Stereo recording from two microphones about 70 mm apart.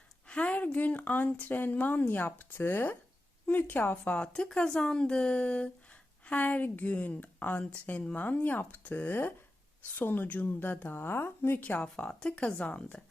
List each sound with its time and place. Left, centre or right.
0.3 s speech: centre